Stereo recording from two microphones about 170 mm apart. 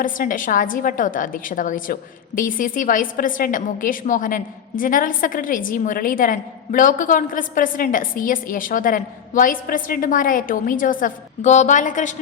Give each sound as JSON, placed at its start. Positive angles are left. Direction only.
{"t": 0.0, "sound": "a woman's voice", "side_deg": 50}